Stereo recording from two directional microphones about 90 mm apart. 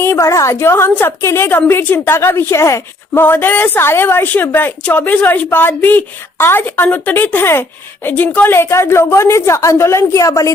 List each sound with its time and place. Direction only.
0.0 s a woman's voice: 30° left (ahead or behind)